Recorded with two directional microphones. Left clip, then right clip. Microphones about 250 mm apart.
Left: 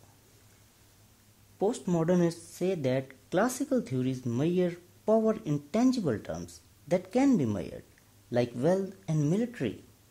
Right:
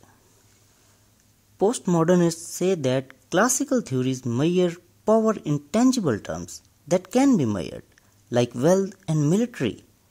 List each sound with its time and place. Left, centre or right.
1.6 s speech: right